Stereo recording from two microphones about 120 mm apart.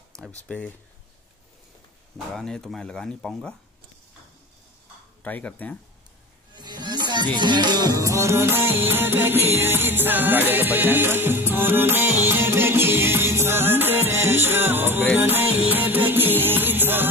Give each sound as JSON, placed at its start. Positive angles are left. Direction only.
{"t": 0.4, "sound": "speech", "side_deg": 15}
{"t": 2.3, "sound": "speech", "side_deg": 5}
{"t": 5.2, "sound": "speech", "side_deg": 15}
{"t": 6.5, "sound": "a sound", "side_deg": -35}
{"t": 7.3, "sound": "music", "side_deg": -40}